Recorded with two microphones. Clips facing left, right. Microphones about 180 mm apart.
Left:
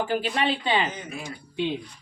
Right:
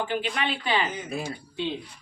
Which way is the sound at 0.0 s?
40° left (ahead or behind).